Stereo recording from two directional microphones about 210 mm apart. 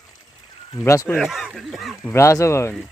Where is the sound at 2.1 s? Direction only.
15° left (ahead or behind).